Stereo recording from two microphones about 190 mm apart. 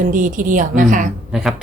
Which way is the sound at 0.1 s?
45° right (ahead or behind).